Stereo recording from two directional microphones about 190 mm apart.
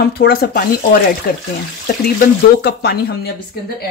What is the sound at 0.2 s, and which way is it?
Speech, 55° left (ahead or behind).